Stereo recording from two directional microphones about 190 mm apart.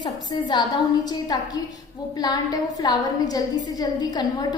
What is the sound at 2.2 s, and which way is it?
A woman's voice, 20° left (ahead or behind).